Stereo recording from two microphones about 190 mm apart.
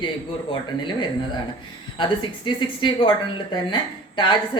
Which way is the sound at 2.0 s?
25° left (ahead or behind).